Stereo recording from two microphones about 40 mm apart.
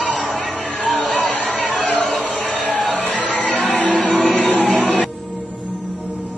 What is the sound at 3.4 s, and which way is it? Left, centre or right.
Music, left.